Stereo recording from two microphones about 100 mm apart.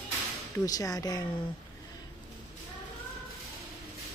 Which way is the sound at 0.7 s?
35° left (ahead or behind).